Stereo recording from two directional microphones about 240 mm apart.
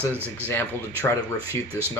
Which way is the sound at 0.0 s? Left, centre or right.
Centre.